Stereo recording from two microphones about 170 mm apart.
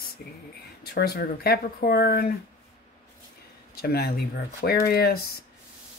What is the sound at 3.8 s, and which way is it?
Speech, 70° left (ahead or behind).